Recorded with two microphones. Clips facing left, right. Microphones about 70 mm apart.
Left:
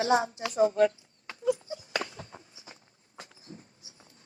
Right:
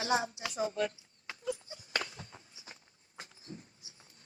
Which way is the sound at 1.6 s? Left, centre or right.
Left.